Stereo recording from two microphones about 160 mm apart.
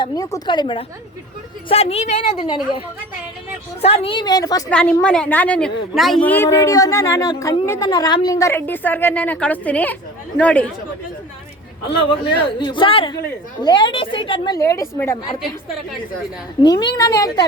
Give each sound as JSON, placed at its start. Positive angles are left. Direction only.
{"t": 0.0, "sound": "a woman's voice", "side_deg": 20}
{"t": 4.7, "sound": "a woman's voice", "side_deg": 5}
{"t": 12.5, "sound": "a woman's voice", "side_deg": 30}
{"t": 16.6, "sound": "a woman's voice", "side_deg": 25}